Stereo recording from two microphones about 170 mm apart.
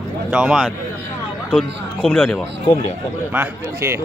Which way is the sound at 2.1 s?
10° left (ahead or behind).